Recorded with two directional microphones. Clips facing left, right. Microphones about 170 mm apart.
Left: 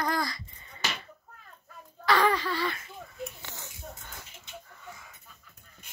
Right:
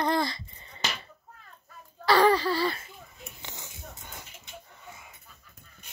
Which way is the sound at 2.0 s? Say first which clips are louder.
Right 4 dB; 35° right (ahead or behind).